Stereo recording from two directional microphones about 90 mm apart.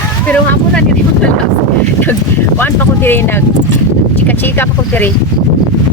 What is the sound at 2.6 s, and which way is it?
Speech, 20° left (ahead or behind).